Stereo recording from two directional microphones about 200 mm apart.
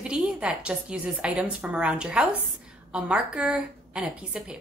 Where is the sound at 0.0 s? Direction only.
5° right (ahead or behind).